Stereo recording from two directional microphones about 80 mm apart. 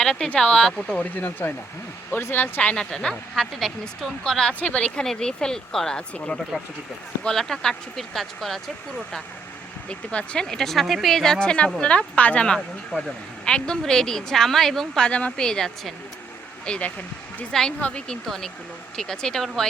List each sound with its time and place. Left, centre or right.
0.0 s speech: centre
9.9 s speech: centre
18.3 s speech: centre